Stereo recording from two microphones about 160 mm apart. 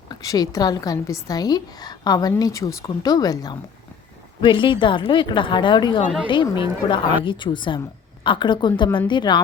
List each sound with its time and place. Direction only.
0.1 s a woman's voice: 25° left (ahead or behind)